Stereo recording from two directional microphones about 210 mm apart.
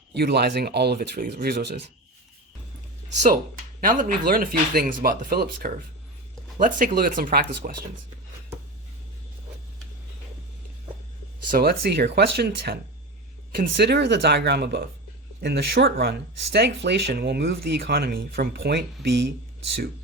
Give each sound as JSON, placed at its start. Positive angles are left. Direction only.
{"t": 0.1, "sound": "speech", "side_deg": -50}
{"t": 3.8, "sound": "speech", "side_deg": -40}
{"t": 11.5, "sound": "speech", "side_deg": -50}